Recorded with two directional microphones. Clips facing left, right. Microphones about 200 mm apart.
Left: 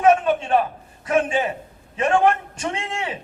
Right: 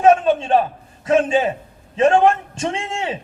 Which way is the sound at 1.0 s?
25° right (ahead or behind).